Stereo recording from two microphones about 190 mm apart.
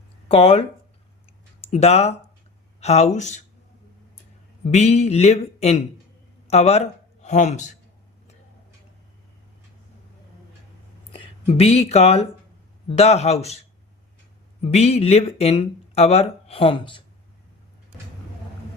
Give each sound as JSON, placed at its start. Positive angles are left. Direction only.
{"t": 0.3, "sound": "speech", "side_deg": 30}
{"t": 1.6, "sound": "speech", "side_deg": 35}
{"t": 4.6, "sound": "speech", "side_deg": 35}
{"t": 11.1, "sound": "speech", "side_deg": 30}
{"t": 14.6, "sound": "speech", "side_deg": 35}